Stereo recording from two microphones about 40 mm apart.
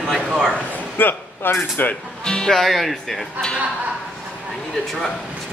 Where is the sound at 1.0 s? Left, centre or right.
Left.